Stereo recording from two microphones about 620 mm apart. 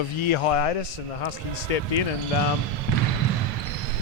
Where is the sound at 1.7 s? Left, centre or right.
Left.